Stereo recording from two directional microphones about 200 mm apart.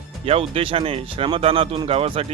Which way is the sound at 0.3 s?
30° right (ahead or behind).